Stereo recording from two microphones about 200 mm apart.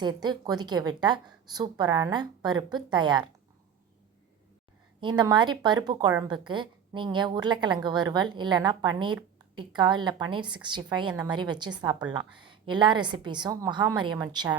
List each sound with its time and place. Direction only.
0.0 s a woman's voice: 20° right (ahead or behind)
4.9 s a woman's voice: 25° right (ahead or behind)